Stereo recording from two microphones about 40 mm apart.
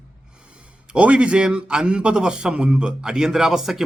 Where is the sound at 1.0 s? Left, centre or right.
Right; by 3.8 s centre.